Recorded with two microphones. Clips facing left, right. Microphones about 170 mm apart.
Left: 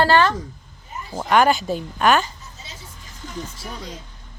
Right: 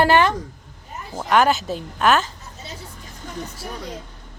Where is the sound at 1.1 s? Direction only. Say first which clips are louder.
Left 1 dB; centre (ahead or behind).